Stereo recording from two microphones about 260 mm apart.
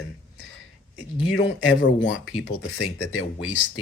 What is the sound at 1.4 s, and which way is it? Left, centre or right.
Speech, left.